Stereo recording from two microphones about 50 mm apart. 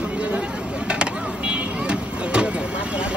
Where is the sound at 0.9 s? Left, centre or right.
Right.